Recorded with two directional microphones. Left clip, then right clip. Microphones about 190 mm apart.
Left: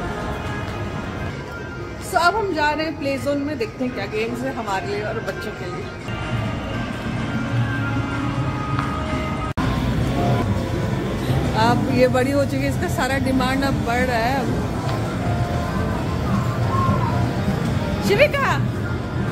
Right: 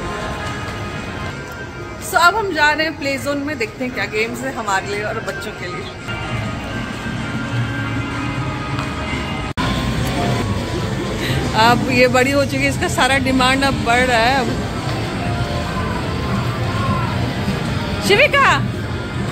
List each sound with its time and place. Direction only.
2.1 s a woman's voice: centre (ahead or behind)
11.5 s speech: 5° right (ahead or behind)
18.0 s speech: 25° right (ahead or behind)